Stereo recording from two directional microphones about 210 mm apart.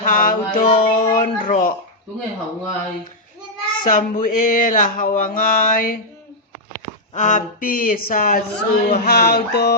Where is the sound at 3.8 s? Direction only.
40° left (ahead or behind).